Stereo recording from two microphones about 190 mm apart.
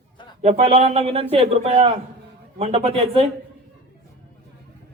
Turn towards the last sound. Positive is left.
turn(degrees=-30)  # may be behind; listen again after turning